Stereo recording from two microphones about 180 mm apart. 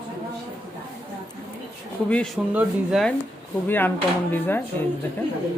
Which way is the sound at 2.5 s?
10° right (ahead or behind).